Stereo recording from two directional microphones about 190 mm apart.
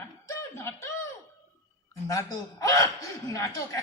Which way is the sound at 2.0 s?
15° left (ahead or behind).